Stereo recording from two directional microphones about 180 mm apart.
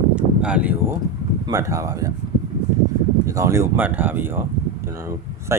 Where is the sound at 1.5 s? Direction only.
20° right (ahead or behind).